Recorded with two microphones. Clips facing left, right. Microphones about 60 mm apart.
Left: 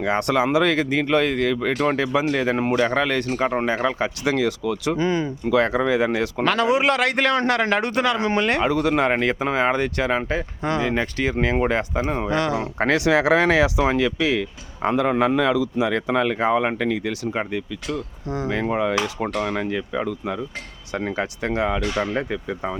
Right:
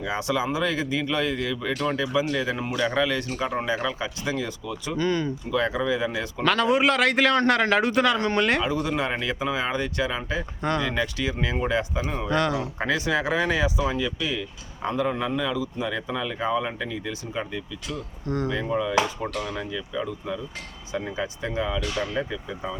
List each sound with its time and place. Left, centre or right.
0.0 s speech: left
4.9 s speech: centre
5.5 s speech: left
6.4 s a man's voice: centre
8.6 s speech: left
10.6 s speech: centre
10.8 s speech: left
12.3 s a man's voice: centre
12.5 s speech: left
21.9 s speech: left
22.2 s speech: left